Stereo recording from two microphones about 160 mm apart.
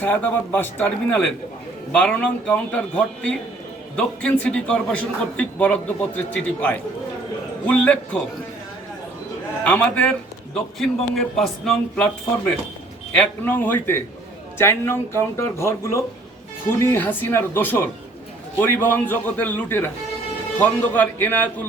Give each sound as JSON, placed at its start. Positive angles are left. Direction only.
{"t": 0.0, "sound": "a man's voice", "side_deg": 10}
{"t": 9.6, "sound": "a man's voice", "side_deg": 10}
{"t": 13.1, "sound": "speech", "side_deg": 10}